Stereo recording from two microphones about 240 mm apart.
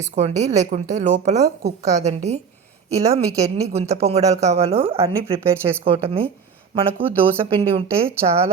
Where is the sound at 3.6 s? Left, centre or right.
Right.